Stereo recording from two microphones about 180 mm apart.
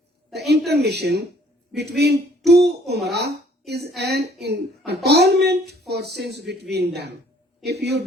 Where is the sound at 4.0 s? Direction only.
65° right (ahead or behind).